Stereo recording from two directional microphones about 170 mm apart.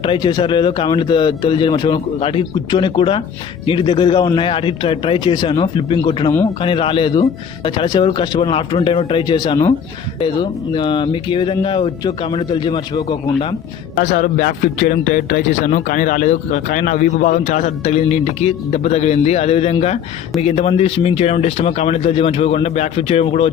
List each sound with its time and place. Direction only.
0.0 s speech: 30° left (ahead or behind)
14.0 s a man's voice: 50° left (ahead or behind)